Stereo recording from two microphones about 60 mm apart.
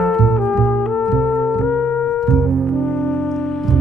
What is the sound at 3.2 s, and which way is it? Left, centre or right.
Music, centre.